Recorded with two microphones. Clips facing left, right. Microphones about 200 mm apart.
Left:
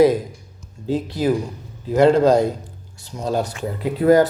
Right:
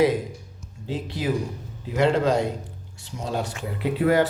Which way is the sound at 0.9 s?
40° left (ahead or behind).